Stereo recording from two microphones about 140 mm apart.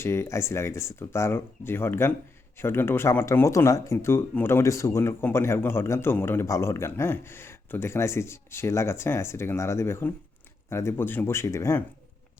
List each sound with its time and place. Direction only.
0.0 s speech: 20° left (ahead or behind)